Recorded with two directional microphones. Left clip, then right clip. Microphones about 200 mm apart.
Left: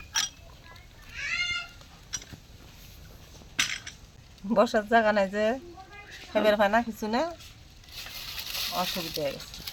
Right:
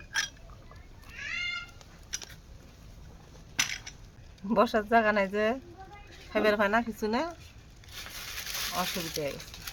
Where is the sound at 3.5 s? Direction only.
60° right (ahead or behind).